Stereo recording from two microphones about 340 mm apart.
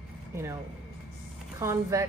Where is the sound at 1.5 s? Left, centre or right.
Centre.